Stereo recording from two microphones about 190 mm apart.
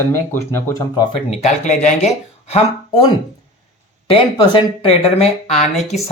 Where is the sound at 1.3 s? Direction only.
35° left (ahead or behind).